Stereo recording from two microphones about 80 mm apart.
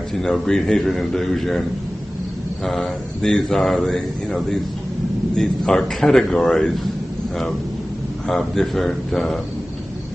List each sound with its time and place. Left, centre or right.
0.1 s speech: centre
2.6 s speech: centre
8.3 s speech: centre